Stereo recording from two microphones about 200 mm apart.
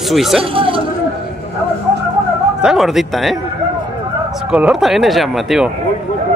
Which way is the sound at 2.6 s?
Centre (ahead or behind).